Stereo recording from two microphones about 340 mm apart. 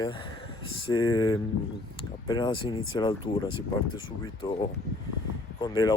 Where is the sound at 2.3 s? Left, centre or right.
Centre.